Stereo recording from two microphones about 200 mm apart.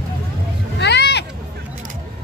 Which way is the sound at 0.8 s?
55° left (ahead or behind).